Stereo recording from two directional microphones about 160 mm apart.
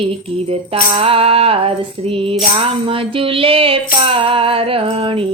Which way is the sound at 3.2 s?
35° right (ahead or behind).